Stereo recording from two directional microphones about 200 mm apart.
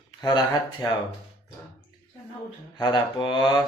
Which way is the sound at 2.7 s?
20° left (ahead or behind).